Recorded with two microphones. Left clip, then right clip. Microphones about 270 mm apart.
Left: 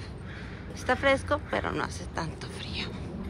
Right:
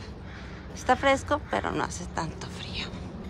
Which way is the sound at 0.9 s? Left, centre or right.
Centre.